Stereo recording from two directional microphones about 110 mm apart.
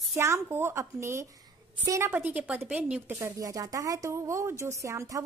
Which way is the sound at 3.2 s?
30° right (ahead or behind).